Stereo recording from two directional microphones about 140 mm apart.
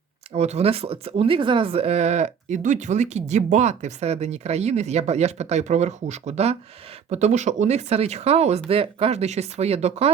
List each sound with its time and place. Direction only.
0.3 s a woman's voice: 50° right (ahead or behind)